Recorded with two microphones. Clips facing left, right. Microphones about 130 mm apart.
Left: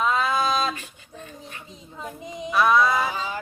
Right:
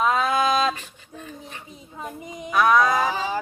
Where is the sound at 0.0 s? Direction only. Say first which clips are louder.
Right 2 dB; 5° right (ahead or behind).